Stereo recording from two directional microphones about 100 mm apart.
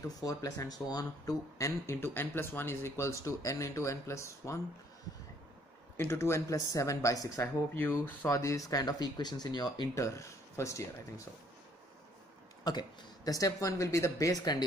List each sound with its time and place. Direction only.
0.2 s speech: 35° left (ahead or behind)
1.9 s speech: 25° left (ahead or behind)
5.9 s speech: 25° left (ahead or behind)
8.3 s speech: 35° left (ahead or behind)
9.9 s speech: 30° left (ahead or behind)
12.6 s speech: 40° left (ahead or behind)